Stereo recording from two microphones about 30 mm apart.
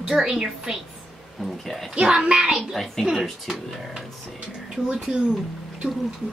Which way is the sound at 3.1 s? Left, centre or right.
Centre.